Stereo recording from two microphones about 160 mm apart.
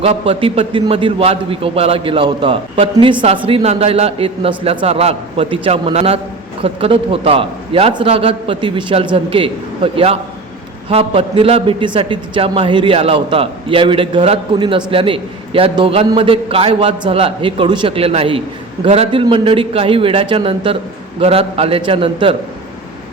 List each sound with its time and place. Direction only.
0.0 s a man's voice: 35° right (ahead or behind)